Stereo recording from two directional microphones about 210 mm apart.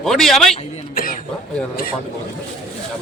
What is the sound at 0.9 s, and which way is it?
Cough, 40° left (ahead or behind).